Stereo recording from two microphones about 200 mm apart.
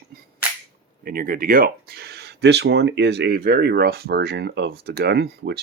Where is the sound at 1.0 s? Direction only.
45° right (ahead or behind).